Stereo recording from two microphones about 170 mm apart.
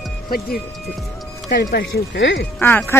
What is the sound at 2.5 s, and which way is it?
Speech, 10° left (ahead or behind).